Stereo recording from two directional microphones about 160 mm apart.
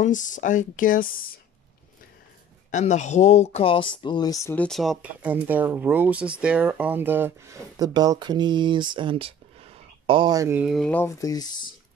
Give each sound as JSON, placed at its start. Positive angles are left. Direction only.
{"t": 0.0, "sound": "speech", "side_deg": 55}
{"t": 2.7, "sound": "speech", "side_deg": 45}
{"t": 4.6, "sound": "speech", "side_deg": 0}
{"t": 7.9, "sound": "speech", "side_deg": -25}
{"t": 10.6, "sound": "speech", "side_deg": 0}
{"t": 10.9, "sound": "speech", "side_deg": 15}